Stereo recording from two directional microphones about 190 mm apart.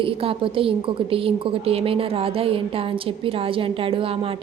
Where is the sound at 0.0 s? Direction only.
30° right (ahead or behind).